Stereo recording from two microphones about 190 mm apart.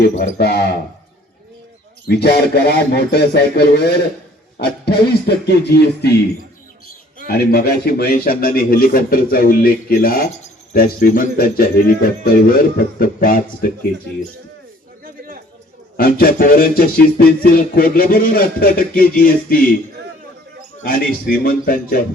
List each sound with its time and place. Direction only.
0.0 s music: 50° left (ahead or behind)
2.0 s speech: 60° left (ahead or behind)
7.3 s music: 55° left (ahead or behind)
16.0 s music: 50° left (ahead or behind)
20.8 s music: 50° left (ahead or behind)